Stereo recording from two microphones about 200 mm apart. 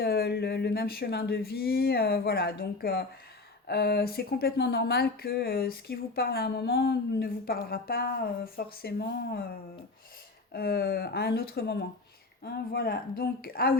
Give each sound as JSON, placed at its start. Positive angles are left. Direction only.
{"t": 0.0, "sound": "speech", "side_deg": 55}
{"t": 10.5, "sound": "speech", "side_deg": 50}